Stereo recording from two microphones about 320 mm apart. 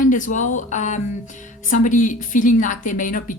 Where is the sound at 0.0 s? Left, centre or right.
Left.